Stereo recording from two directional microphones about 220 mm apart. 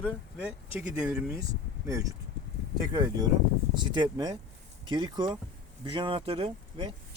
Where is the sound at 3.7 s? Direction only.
20° right (ahead or behind).